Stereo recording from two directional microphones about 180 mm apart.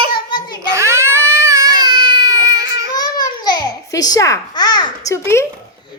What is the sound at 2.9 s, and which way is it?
Babbling, 20° left (ahead or behind).